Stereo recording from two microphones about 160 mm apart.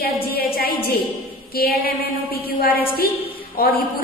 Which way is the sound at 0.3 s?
70° left (ahead or behind).